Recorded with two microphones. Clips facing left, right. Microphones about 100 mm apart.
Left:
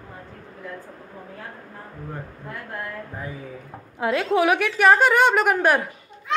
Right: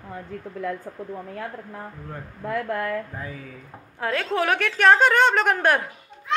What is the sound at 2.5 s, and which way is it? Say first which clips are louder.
Speech: right 8 dB; 90° right.